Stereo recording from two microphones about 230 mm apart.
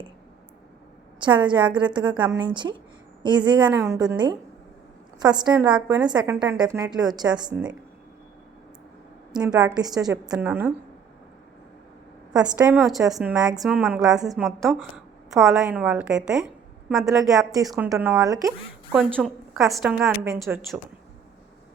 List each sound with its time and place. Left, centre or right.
1.2 s a woman's voice: right
9.3 s a woman's voice: centre
12.4 s a woman's voice: centre
18.9 s a woman's voice: centre